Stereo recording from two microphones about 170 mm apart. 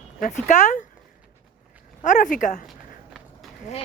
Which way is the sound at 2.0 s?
50° left (ahead or behind).